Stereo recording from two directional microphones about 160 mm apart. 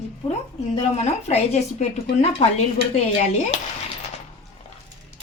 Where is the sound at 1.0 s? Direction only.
45° left (ahead or behind).